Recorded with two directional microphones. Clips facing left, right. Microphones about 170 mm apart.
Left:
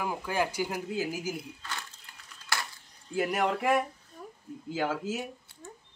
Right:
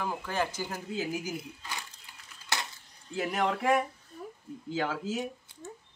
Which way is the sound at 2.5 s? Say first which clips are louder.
Even; 20° right (ahead or behind).